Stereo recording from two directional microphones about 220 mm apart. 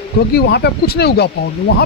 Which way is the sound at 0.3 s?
50° left (ahead or behind).